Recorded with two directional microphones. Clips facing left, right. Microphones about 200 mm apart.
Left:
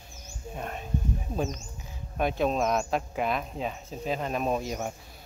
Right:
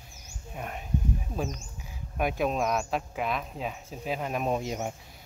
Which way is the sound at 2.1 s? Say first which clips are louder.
Left 1 dB; 10° right (ahead or behind).